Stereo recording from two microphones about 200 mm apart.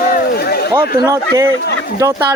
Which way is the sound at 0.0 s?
45° left (ahead or behind).